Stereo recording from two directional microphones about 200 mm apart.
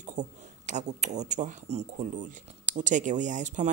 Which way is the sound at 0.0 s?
35° right (ahead or behind).